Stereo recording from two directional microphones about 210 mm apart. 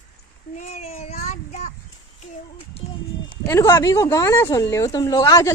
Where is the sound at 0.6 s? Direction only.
35° left (ahead or behind).